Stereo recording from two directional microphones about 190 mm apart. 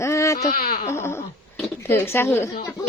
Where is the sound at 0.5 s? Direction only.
50° left (ahead or behind).